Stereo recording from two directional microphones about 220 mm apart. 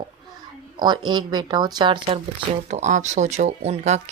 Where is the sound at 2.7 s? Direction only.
35° right (ahead or behind).